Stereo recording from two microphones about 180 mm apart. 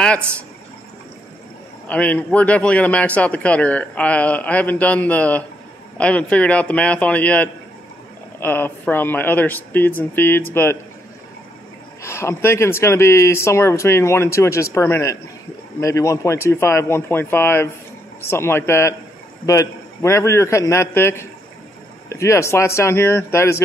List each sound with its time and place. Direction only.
1.9 s speech: 10° left (ahead or behind)
12.0 s speech: 15° left (ahead or behind)